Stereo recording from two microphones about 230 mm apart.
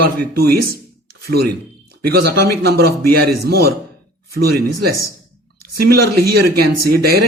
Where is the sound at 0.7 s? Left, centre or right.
Right.